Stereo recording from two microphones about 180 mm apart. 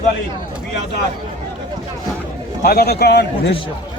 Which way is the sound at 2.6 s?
60° left (ahead or behind).